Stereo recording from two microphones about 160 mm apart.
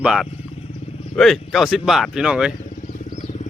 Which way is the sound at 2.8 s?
50° left (ahead or behind).